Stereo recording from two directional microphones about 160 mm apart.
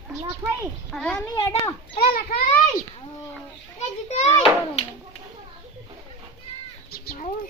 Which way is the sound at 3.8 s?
45° left (ahead or behind).